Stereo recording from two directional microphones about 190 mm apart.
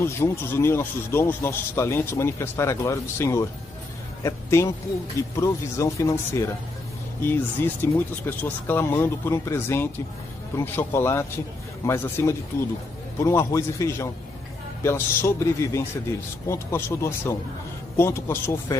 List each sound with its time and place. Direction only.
0.0 s a man's voice: 15° left (ahead or behind)